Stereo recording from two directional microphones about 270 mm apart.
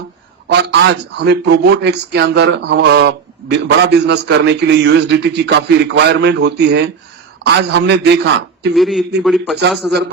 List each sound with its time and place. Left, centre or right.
0.4 s a sound: right
1.2 s a man's voice: right
8.7 s a man's voice: centre